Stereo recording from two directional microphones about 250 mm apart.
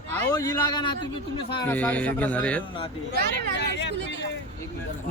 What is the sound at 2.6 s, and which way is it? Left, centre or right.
Speech, centre.